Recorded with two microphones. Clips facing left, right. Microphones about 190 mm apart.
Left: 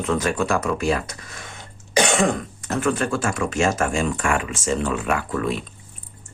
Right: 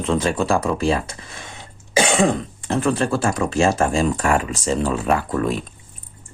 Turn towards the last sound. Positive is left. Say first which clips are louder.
# right 3 dB
turn(degrees=-35)  # may be behind; listen again after turning